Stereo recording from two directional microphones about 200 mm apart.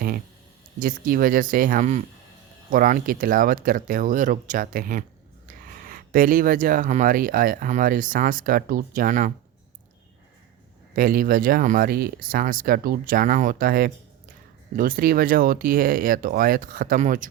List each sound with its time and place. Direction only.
0.8 s speech: 45° right (ahead or behind)
10.9 s speech: 45° right (ahead or behind)